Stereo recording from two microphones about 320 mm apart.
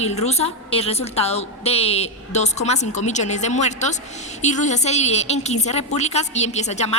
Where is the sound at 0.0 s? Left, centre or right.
Centre.